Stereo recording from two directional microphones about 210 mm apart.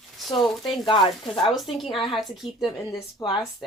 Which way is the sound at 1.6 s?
Centre (ahead or behind).